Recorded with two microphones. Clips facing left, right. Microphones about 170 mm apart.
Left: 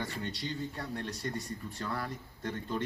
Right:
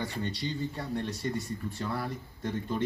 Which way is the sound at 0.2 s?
Centre (ahead or behind).